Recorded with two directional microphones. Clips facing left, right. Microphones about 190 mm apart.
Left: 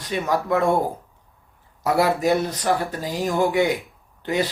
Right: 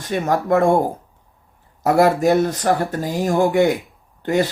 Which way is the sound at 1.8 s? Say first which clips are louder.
Right 5 dB; 50° right (ahead or behind).